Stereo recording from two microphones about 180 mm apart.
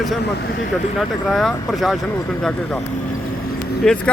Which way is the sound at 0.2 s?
65° left (ahead or behind).